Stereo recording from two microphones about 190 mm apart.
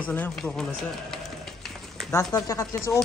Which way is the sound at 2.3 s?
15° left (ahead or behind).